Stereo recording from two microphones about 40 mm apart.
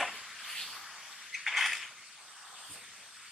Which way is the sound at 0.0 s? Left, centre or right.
Centre.